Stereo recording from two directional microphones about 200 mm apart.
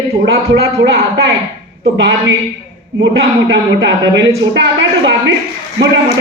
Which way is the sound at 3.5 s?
65° right (ahead or behind).